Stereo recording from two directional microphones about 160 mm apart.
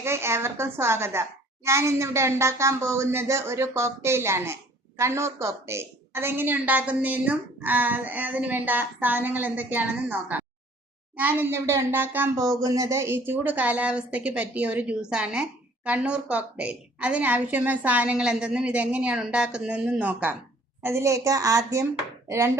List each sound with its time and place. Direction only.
0.0 s a woman's voice: 15° right (ahead or behind)
22.3 s chopping: 15° right (ahead or behind)